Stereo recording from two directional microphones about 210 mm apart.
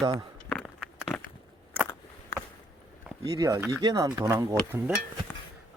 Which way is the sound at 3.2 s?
15° right (ahead or behind).